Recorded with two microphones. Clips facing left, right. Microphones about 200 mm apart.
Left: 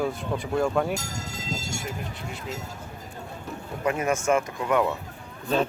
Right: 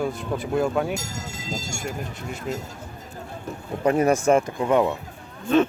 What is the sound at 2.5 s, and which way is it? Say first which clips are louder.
Speech: right 7 dB; 45° right (ahead or behind).